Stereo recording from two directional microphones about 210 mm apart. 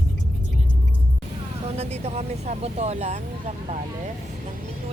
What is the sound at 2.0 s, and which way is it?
Vehicle, 30° right (ahead or behind).